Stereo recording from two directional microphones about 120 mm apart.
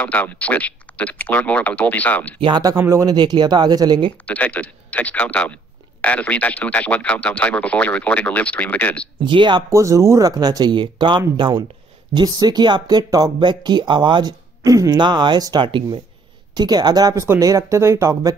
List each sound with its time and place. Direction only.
0.0 s speech: 10° left (ahead or behind)
2.4 s speech: 35° right (ahead or behind)
3.2 s speech: 35° right (ahead or behind)
4.3 s speech: 10° left (ahead or behind)
9.2 s speech: 40° right (ahead or behind)
9.7 s speech: 25° right (ahead or behind)
15.0 s speech: 40° right (ahead or behind); by 18.3 s 25° right (ahead or behind)